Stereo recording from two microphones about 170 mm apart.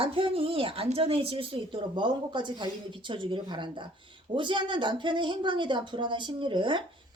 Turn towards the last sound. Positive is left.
turn(degrees=-30)  # may be behind; listen again after turning